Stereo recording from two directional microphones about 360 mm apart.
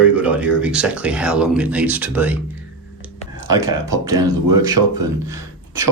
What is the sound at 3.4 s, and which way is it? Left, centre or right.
Speech, centre.